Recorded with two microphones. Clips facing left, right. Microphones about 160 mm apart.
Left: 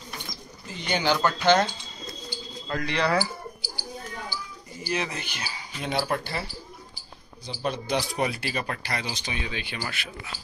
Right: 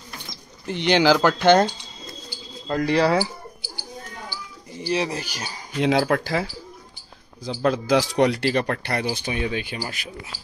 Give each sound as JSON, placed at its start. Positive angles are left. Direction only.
{"t": 0.7, "sound": "speech", "side_deg": -75}
{"t": 2.2, "sound": "bird", "side_deg": -35}
{"t": 4.8, "sound": "speech", "side_deg": -30}
{"t": 5.8, "sound": "speech", "side_deg": -90}
{"t": 9.8, "sound": "speech", "side_deg": -35}